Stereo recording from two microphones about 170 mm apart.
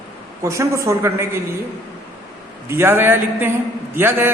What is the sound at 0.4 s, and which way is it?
Speech, 15° right (ahead or behind).